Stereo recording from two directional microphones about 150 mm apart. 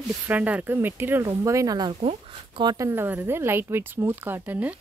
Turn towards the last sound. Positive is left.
turn(degrees=-10)  # may be behind; listen again after turning